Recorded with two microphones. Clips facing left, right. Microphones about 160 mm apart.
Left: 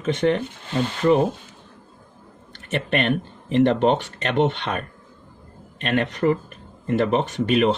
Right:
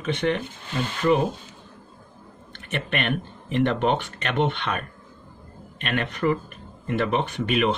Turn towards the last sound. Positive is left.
turn(degrees=35)  # may be behind; listen again after turning